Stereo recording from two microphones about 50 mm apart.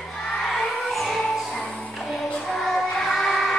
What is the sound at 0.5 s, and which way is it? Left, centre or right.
Music, centre.